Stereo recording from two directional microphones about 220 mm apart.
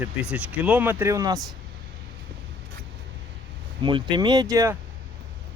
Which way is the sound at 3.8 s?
20° right (ahead or behind).